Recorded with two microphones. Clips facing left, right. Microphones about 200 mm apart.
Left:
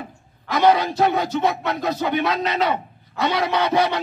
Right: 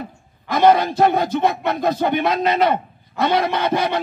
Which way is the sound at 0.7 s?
50° right (ahead or behind).